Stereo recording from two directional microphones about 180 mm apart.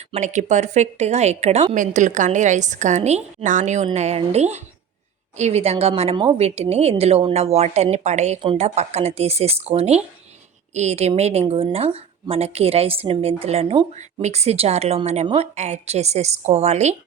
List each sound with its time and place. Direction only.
0.1 s a woman's voice: 40° right (ahead or behind)